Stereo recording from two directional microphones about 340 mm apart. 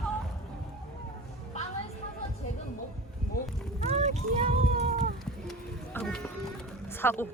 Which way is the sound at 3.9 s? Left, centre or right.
Centre.